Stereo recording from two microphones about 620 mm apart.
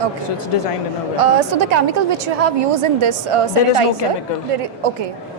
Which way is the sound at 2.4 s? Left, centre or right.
Right.